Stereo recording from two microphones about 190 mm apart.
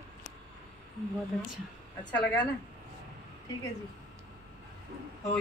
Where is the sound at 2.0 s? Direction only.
5° left (ahead or behind).